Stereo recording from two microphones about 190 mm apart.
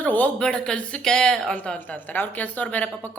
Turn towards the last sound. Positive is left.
turn(degrees=5)  # may be behind; listen again after turning